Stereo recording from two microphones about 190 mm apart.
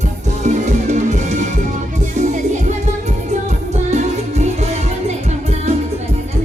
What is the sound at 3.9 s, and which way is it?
Music, 35° right (ahead or behind).